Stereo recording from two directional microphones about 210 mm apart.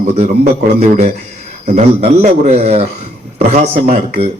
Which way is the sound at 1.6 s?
30° right (ahead or behind).